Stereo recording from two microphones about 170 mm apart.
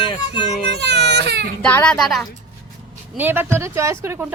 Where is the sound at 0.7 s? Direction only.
85° right.